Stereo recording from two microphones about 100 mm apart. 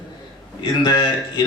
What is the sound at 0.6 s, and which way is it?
Speech, 45° left (ahead or behind).